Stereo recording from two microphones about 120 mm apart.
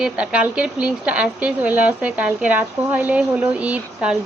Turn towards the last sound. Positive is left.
turn(degrees=-10)  # may be behind; listen again after turning